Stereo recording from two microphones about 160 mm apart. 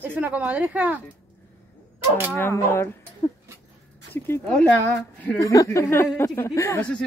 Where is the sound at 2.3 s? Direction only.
15° left (ahead or behind).